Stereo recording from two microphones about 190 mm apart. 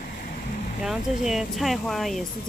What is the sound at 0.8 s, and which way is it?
Speech, centre (ahead or behind).